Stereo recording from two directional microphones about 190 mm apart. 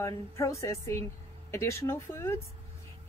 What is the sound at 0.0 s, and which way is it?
Speech, 15° left (ahead or behind).